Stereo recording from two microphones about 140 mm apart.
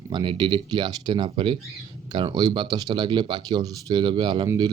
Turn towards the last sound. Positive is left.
turn(degrees=-35)  # may be behind; listen again after turning